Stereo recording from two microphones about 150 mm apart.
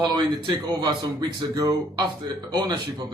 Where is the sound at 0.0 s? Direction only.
30° right (ahead or behind).